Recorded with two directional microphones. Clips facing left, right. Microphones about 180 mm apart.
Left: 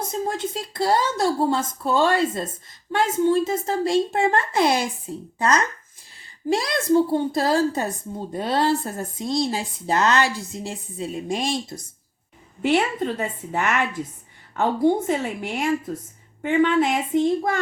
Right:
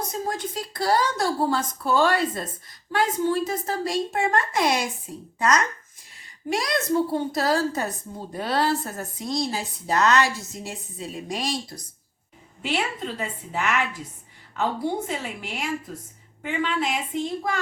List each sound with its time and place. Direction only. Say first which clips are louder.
0.1 s speech: left 3 dB; 25° left (ahead or behind)
12.6 s a woman's voice: left 7 dB; 50° left (ahead or behind)